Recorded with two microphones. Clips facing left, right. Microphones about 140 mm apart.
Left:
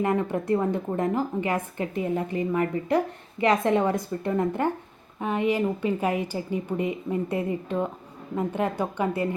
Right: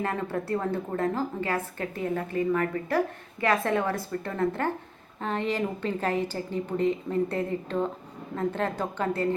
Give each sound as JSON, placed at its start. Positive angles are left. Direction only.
{"t": 0.0, "sound": "a woman's voice", "side_deg": 15}